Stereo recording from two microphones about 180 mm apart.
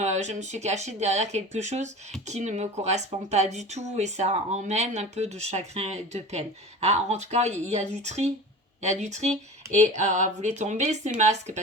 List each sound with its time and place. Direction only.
0.0 s speech: 40° right (ahead or behind)